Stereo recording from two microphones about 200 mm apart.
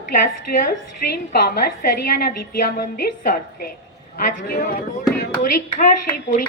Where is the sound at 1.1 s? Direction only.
50° left (ahead or behind).